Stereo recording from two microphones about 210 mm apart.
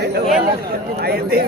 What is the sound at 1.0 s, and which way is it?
Speech, 50° right (ahead or behind).